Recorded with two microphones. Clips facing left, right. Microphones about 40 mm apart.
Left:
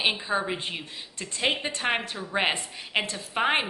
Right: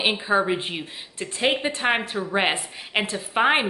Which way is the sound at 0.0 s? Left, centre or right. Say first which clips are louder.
Right 5 dB; centre.